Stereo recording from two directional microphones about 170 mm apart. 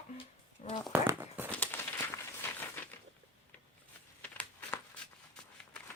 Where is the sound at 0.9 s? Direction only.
10° right (ahead or behind).